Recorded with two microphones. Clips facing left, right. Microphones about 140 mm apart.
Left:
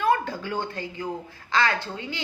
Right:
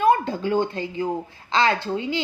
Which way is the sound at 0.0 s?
20° right (ahead or behind).